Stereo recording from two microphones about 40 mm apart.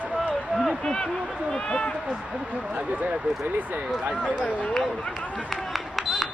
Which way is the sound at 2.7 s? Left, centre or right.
Right.